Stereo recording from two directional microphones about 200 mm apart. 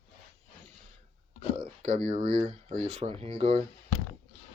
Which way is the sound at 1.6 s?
35° right (ahead or behind).